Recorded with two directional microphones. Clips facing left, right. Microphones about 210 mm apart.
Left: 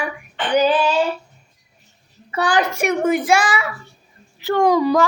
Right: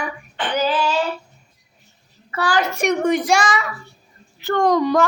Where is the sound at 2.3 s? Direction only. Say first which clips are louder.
Left 2 dB; 20° left (ahead or behind).